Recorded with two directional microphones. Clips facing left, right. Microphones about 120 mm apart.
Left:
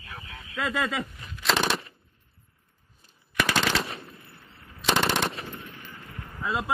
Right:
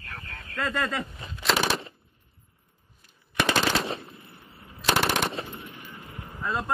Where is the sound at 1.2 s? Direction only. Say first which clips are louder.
Right 3 dB; 25° right (ahead or behind).